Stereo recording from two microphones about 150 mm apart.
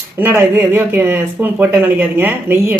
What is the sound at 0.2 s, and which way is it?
Speech, 15° right (ahead or behind).